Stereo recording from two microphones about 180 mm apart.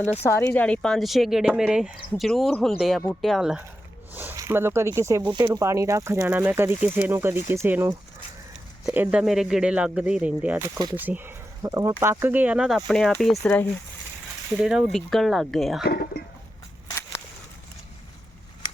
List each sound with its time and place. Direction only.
0.2 s speech: 15° left (ahead or behind)
14.6 s speech: 5° right (ahead or behind)
15.8 s speech: 60° left (ahead or behind)